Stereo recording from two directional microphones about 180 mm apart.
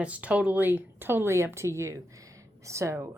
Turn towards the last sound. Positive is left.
turn(degrees=-15)  # may be behind; listen again after turning